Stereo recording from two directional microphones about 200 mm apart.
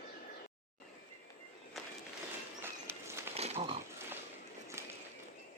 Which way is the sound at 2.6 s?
10° right (ahead or behind).